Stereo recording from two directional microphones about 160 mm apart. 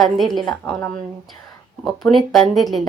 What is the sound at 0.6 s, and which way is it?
Speech, 15° left (ahead or behind).